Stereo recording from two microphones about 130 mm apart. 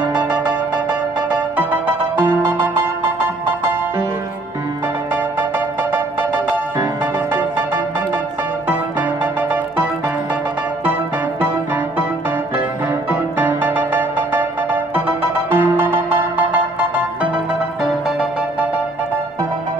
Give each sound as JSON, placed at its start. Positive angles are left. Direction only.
{"t": 1.3, "sound": "music", "side_deg": -15}
{"t": 7.3, "sound": "music", "side_deg": -15}
{"t": 9.2, "sound": "music", "side_deg": -15}
{"t": 13.1, "sound": "music", "side_deg": -15}